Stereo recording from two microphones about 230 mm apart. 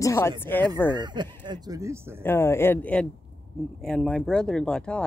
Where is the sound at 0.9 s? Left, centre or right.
Centre.